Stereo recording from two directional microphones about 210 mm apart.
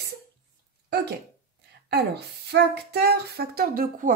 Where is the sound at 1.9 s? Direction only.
50° right (ahead or behind).